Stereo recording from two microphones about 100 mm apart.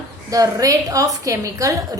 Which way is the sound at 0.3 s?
35° right (ahead or behind).